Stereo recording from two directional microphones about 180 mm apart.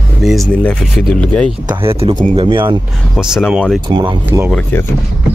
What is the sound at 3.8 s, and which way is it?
Speech, 25° right (ahead or behind).